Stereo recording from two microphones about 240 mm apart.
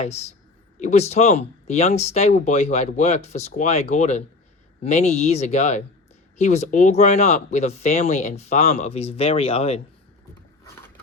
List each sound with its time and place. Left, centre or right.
0.0 s speech: left